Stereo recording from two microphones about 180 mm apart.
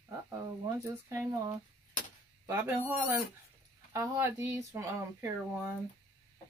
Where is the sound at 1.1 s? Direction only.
15° right (ahead or behind).